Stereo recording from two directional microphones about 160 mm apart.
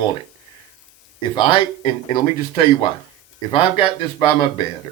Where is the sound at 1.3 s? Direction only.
35° left (ahead or behind).